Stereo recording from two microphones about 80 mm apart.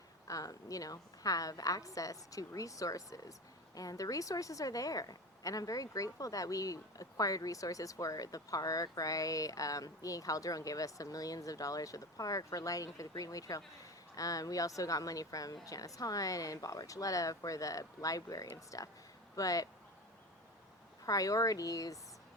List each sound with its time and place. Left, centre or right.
0.3 s a woman's voice: left
21.1 s a woman's voice: left